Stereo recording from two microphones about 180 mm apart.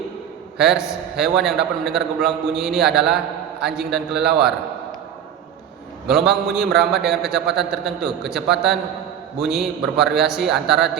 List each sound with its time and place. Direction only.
0.6 s a man's voice: 5° right (ahead or behind)
6.1 s a man's voice: centre (ahead or behind)